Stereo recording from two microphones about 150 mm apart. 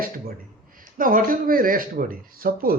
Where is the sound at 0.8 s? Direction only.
65° right (ahead or behind).